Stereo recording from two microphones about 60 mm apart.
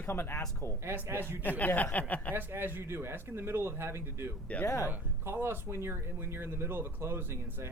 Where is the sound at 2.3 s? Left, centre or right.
Right.